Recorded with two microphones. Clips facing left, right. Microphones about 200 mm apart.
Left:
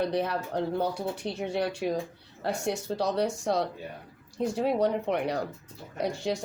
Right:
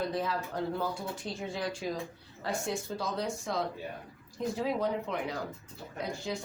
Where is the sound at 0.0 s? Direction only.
70° left (ahead or behind).